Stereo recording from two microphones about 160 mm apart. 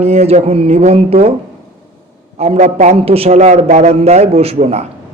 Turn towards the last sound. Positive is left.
turn(degrees=-40)  # may be behind; listen again after turning